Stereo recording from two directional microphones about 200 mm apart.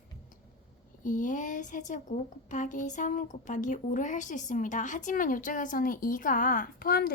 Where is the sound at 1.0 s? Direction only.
40° left (ahead or behind).